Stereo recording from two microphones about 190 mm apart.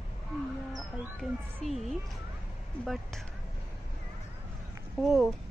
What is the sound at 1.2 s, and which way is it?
Speech, centre (ahead or behind).